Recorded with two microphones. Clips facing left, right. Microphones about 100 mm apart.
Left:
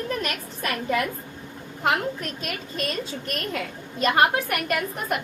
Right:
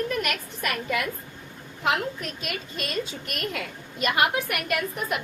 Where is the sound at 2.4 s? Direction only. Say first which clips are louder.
Left 2 dB; 40° left (ahead or behind).